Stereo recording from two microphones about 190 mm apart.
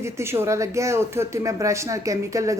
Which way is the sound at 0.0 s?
15° right (ahead or behind).